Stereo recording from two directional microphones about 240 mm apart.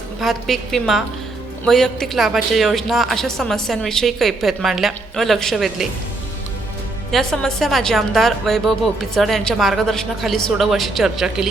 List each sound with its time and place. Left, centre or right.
0.2 s a woman's voice: centre
7.1 s a woman's voice: centre